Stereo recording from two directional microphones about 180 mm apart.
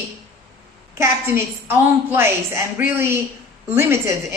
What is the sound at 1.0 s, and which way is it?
A woman's voice, 15° right (ahead or behind).